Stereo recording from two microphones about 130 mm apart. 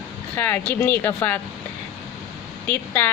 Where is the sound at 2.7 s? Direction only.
15° left (ahead or behind).